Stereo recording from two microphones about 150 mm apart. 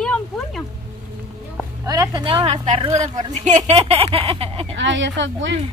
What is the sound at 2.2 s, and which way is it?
A woman's voice, 35° right (ahead or behind).